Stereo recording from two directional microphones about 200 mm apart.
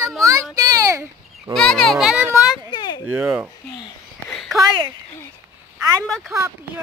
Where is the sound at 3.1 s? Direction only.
5° right (ahead or behind).